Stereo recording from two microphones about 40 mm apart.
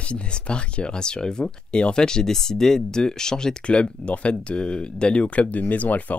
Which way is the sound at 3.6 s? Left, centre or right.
Left.